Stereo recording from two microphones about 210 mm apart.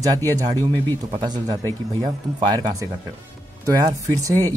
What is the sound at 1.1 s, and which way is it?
Speech, 20° right (ahead or behind).